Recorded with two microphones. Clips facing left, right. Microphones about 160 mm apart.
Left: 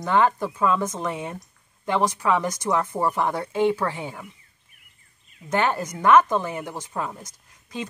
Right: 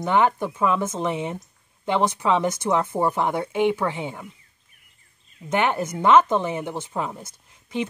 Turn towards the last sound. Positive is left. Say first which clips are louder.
# right 6 dB
turn(degrees=-25)  # may be behind; listen again after turning